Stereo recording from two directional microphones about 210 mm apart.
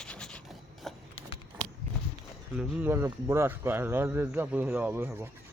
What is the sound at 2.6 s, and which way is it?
Speech, 10° right (ahead or behind).